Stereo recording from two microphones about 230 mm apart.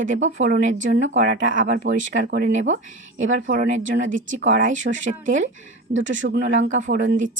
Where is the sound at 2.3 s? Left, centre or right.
Right.